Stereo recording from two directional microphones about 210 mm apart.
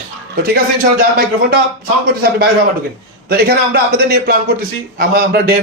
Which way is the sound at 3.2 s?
45° right (ahead or behind).